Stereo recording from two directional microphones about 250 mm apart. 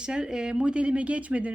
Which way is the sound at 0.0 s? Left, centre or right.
Centre.